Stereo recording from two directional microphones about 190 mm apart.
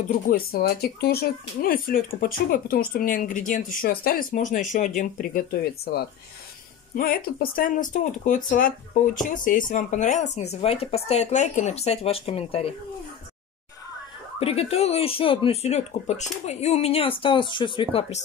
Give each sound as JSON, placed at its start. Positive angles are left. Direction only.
{"t": 0.3, "sound": "speech", "side_deg": 55}
{"t": 14.4, "sound": "speech", "side_deg": 30}